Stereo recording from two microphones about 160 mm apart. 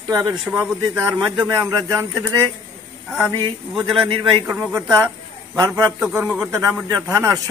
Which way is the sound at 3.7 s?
Centre (ahead or behind).